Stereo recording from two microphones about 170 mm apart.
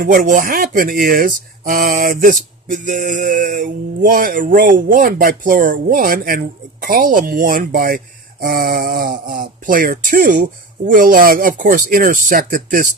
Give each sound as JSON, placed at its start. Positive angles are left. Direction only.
{"t": 0.0, "sound": "speech", "side_deg": -55}